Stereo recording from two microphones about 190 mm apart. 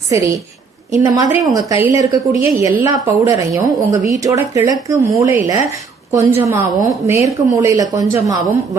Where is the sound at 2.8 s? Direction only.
15° right (ahead or behind).